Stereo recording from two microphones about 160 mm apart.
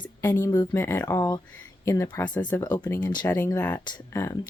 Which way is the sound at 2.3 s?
10° left (ahead or behind).